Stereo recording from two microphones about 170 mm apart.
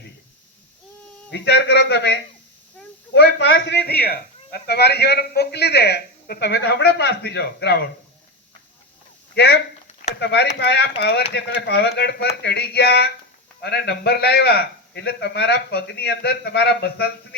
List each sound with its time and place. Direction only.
1.3 s a man's voice: 80° left
9.3 s speech: 75° left (ahead or behind)
10.2 s speech: 90° left
10.6 s a man's voice: 75° left (ahead or behind)